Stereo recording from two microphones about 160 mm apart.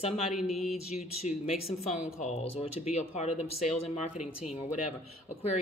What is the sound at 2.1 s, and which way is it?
Speech, 40° left (ahead or behind).